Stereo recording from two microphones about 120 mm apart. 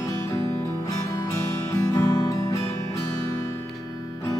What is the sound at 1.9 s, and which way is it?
Guitar, 25° left (ahead or behind).